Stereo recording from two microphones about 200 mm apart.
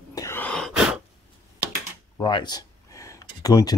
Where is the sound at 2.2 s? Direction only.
25° left (ahead or behind).